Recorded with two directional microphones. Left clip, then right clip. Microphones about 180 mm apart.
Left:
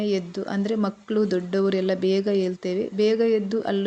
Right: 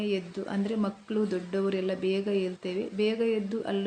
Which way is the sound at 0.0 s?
30° left (ahead or behind).